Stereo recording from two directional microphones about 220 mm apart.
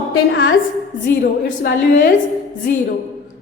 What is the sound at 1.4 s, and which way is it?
Speech, 40° left (ahead or behind).